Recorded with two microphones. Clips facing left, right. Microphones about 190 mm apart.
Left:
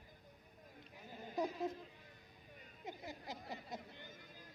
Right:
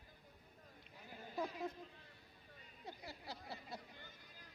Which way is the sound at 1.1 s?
20° left (ahead or behind).